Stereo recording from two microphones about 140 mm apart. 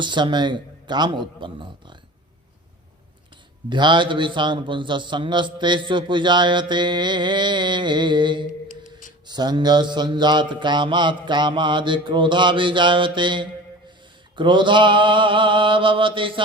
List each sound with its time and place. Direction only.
0.0 s a man's voice: 35° right (ahead or behind)
3.7 s a man's voice: 35° right (ahead or behind)
8.7 s a sound: 65° left (ahead or behind)
9.2 s a man's voice: 30° right (ahead or behind)